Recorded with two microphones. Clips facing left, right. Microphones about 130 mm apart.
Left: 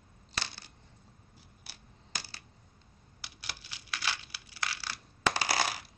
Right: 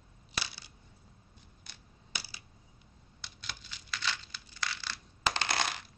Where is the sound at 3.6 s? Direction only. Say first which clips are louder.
Even; 65° left (ahead or behind).